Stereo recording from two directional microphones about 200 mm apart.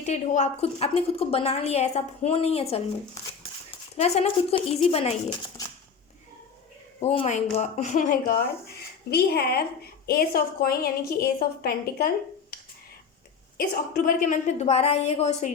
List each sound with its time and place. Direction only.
0.0 s a woman's voice: 35° left (ahead or behind)
3.9 s a woman's voice: 30° left (ahead or behind)
7.0 s speech: 30° left (ahead or behind); by 12.5 s 50° left (ahead or behind)
13.6 s a woman's voice: 40° left (ahead or behind)